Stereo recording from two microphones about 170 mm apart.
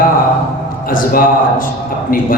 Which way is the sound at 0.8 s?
55° left (ahead or behind).